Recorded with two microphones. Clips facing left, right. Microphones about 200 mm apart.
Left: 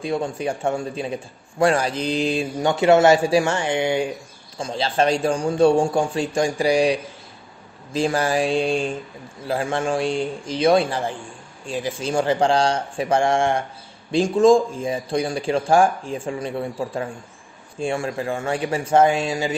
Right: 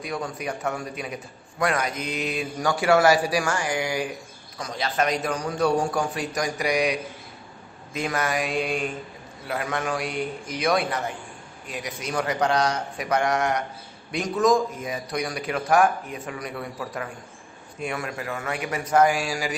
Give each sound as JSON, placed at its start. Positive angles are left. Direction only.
{"t": 0.0, "sound": "a man's voice", "side_deg": 30}